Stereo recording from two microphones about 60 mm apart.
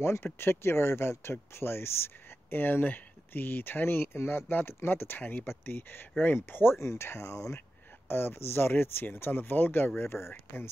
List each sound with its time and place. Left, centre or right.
0.0 s speech: left
6.8 s speech: left
8.1 s speech: left